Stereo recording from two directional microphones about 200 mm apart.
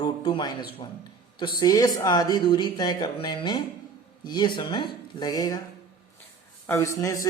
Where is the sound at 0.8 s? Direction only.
25° left (ahead or behind).